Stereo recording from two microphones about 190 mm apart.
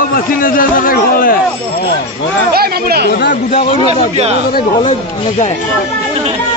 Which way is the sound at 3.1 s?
55° left (ahead or behind).